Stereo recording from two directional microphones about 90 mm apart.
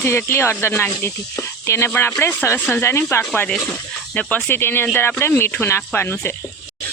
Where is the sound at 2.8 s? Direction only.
25° left (ahead or behind).